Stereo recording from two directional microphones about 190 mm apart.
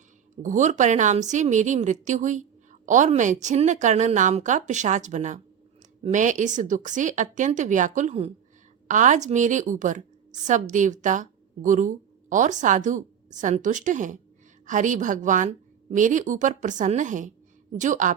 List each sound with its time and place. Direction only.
0.4 s a woman's voice: 40° right (ahead or behind)